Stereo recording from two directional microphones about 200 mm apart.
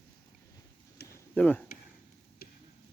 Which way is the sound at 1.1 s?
10° left (ahead or behind).